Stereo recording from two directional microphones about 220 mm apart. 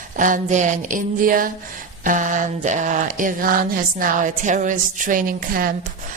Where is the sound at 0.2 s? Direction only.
35° right (ahead or behind).